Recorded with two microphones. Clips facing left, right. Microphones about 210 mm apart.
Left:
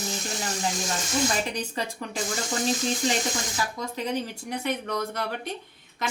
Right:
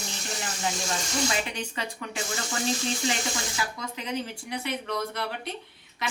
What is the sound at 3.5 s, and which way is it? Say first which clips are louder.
Speech: left 3 dB; 40° left (ahead or behind).